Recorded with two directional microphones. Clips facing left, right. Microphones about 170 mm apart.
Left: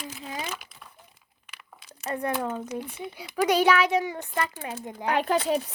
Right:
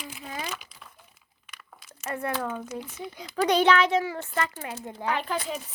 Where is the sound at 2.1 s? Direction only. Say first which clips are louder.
Left 2 dB; 15° left (ahead or behind).